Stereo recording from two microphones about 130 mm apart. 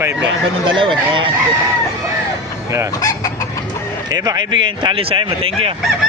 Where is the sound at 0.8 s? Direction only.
40° right (ahead or behind).